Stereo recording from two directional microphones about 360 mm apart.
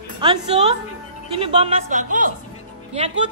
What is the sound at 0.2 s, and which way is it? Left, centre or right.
A woman's voice, centre.